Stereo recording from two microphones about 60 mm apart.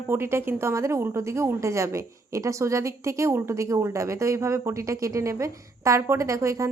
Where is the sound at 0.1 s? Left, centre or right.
Right.